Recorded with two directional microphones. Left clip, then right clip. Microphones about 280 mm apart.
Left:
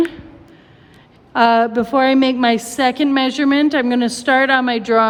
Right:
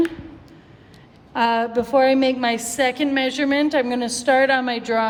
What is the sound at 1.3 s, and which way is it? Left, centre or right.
A woman's voice, centre.